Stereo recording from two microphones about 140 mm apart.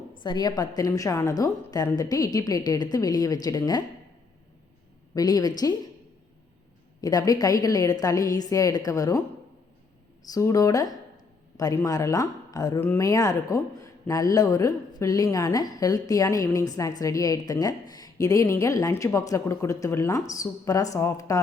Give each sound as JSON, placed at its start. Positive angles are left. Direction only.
{"t": 0.2, "sound": "a woman's voice", "side_deg": 30}
{"t": 5.1, "sound": "a woman's voice", "side_deg": 25}
{"t": 7.0, "sound": "a woman's voice", "side_deg": 25}
{"t": 10.3, "sound": "a woman's voice", "side_deg": 25}